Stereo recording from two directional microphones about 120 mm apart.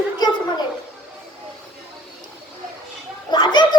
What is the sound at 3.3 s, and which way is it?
Children playing, 40° left (ahead or behind).